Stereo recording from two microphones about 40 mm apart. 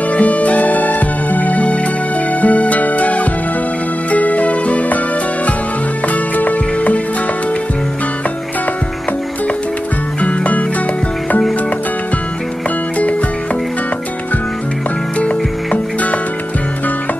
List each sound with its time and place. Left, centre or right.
0.1 s music: left
6.0 s music: left
10.2 s music: left
15.1 s music: left